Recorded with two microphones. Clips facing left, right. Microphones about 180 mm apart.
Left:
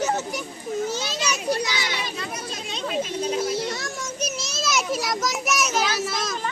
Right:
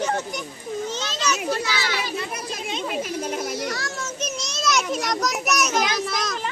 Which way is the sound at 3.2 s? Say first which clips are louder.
Left 3 dB; 55° right (ahead or behind).